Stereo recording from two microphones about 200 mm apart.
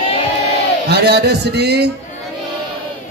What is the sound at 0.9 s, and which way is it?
Speech, 55° right (ahead or behind).